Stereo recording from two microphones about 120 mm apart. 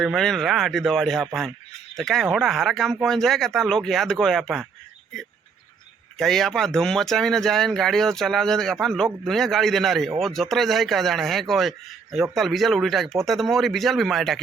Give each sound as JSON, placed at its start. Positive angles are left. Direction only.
{"t": 0.0, "sound": "speech", "side_deg": 0}
{"t": 6.1, "sound": "speech", "side_deg": 5}